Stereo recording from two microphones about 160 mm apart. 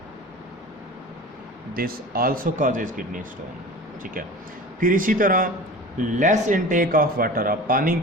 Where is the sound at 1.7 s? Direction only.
65° right (ahead or behind).